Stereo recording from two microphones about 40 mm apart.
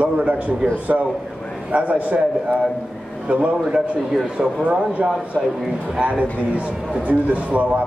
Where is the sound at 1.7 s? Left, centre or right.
Right.